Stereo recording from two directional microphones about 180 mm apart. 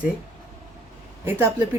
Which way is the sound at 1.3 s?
10° right (ahead or behind).